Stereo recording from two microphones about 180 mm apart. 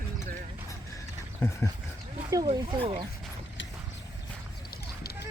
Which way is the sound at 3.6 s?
90° left.